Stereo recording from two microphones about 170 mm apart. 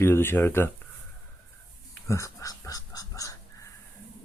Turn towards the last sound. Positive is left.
turn(degrees=20)  # may be behind; listen again after turning